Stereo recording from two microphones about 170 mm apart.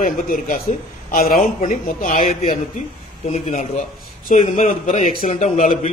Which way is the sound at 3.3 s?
40° left (ahead or behind).